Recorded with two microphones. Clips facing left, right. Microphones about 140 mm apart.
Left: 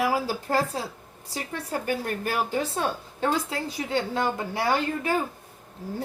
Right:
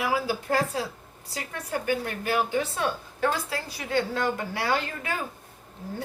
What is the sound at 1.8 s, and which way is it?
Speech, 40° left (ahead or behind).